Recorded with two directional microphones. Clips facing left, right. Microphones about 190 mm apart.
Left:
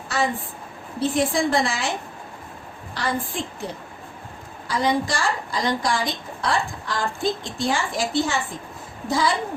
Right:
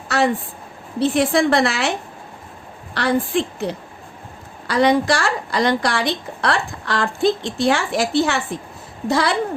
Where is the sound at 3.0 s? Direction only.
70° right (ahead or behind).